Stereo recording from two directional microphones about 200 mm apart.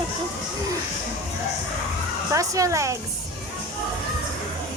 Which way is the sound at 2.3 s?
15° right (ahead or behind).